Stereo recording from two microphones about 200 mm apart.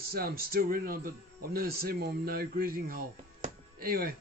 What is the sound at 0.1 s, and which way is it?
Speech, 50° right (ahead or behind).